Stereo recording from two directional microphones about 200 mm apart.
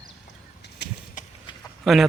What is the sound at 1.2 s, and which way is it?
Clip-clop, 40° left (ahead or behind).